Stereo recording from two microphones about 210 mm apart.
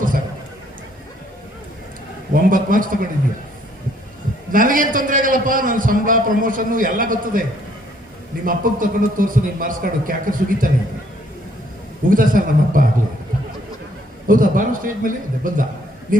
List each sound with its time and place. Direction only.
2.3 s a man's voice: 40° right (ahead or behind)
4.5 s a man's voice: 40° right (ahead or behind)
8.4 s a man's voice: 40° right (ahead or behind)
12.0 s a man's voice: 40° right (ahead or behind)
14.3 s a man's voice: 40° right (ahead or behind)